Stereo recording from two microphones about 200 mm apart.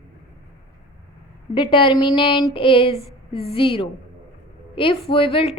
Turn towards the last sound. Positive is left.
turn(degrees=30)  # may be behind; listen again after turning